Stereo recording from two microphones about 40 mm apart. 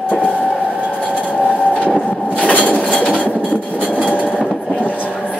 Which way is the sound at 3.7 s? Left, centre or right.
Left.